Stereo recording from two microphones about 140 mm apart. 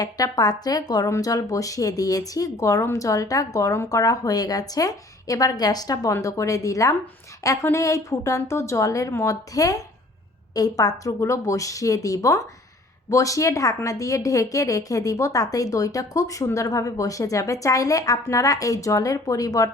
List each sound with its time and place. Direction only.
0.0 s a woman's voice: 30° left (ahead or behind)